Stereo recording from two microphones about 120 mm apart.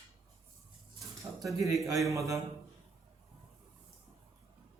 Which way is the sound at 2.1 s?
25° right (ahead or behind).